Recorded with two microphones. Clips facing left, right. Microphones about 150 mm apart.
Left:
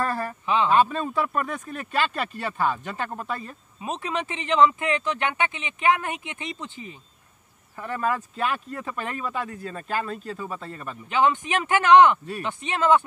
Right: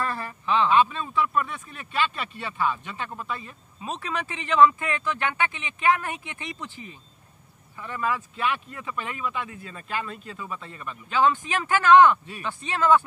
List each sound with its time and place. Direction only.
0.0 s a sound: 40° left (ahead or behind)
0.7 s speech: 45° left (ahead or behind)
3.8 s speech: 20° left (ahead or behind)
7.8 s speech: 45° left (ahead or behind)
11.1 s speech: 20° left (ahead or behind)